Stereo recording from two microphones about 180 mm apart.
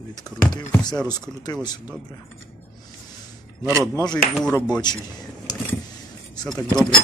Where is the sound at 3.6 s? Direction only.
15° right (ahead or behind).